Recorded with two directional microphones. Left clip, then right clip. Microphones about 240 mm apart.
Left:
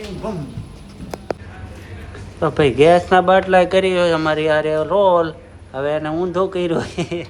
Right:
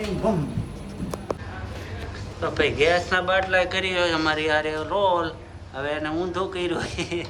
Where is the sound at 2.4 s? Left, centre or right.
Centre.